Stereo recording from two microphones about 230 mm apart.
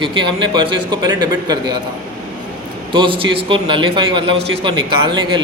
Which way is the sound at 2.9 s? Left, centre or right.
Right.